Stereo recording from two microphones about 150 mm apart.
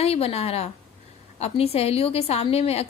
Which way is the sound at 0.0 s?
40° left (ahead or behind).